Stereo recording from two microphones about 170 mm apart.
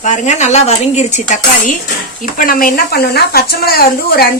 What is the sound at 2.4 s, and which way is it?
Speech, 55° left (ahead or behind).